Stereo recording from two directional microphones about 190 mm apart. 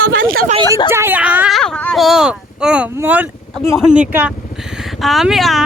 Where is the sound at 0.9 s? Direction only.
10° right (ahead or behind).